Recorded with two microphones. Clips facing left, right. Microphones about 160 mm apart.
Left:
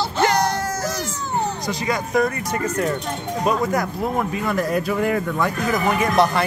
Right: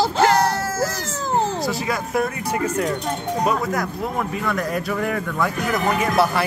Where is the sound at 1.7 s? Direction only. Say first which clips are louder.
Left 1 dB; 5° right (ahead or behind).